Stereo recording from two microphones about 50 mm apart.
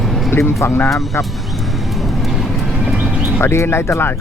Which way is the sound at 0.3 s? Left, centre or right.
Left.